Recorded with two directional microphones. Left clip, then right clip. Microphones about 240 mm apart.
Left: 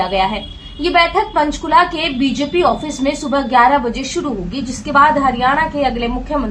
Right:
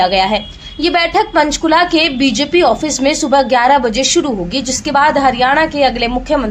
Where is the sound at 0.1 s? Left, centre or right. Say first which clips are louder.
Right 4 dB; right.